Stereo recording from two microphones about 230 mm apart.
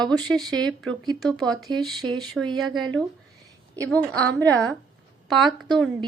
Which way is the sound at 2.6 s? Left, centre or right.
Centre.